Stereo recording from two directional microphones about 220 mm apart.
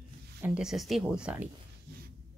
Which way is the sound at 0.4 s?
5° right (ahead or behind).